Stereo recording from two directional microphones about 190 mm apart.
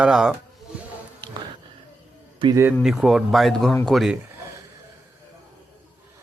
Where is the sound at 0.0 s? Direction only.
5° right (ahead or behind).